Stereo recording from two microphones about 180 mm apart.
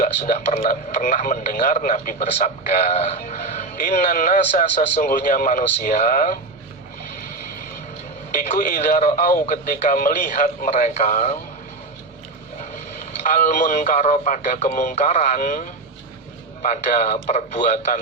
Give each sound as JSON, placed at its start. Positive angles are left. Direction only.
{"t": 0.0, "sound": "a man's voice", "side_deg": 45}
{"t": 8.4, "sound": "a man's voice", "side_deg": 50}
{"t": 13.2, "sound": "a man's voice", "side_deg": 45}